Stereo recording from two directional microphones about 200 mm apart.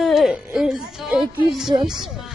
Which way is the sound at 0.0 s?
Centre (ahead or behind).